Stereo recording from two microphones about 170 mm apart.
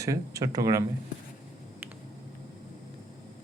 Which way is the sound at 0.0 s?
20° right (ahead or behind).